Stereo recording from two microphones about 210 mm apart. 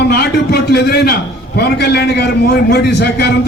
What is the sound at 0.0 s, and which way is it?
A man's voice, 50° left (ahead or behind).